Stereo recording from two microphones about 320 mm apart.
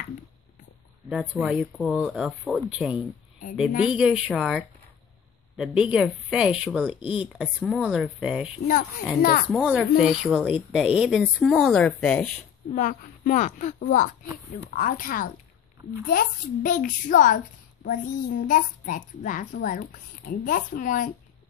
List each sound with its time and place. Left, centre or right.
1.0 s speech: centre
7.0 s speech: centre
7.3 s speech: centre
9.2 s a child's voice: left
9.5 s speech: centre
12.7 s a child's voice: left